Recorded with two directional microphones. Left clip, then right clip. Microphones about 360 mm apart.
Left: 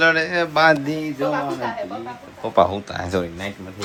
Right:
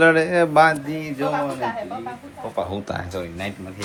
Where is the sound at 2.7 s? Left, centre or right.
Centre.